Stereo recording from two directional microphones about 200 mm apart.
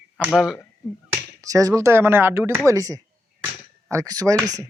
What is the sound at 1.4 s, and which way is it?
Speech, 15° right (ahead or behind).